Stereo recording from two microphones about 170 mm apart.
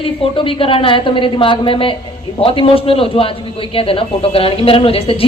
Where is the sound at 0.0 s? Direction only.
30° left (ahead or behind).